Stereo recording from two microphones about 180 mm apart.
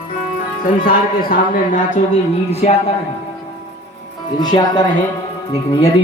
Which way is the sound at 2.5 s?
35° left (ahead or behind).